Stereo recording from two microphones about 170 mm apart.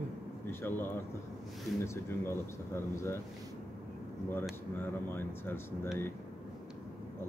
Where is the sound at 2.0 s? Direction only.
15° left (ahead or behind).